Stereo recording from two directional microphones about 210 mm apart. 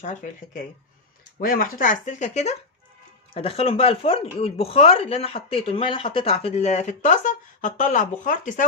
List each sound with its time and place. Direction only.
0.0 s speech: 35° left (ahead or behind)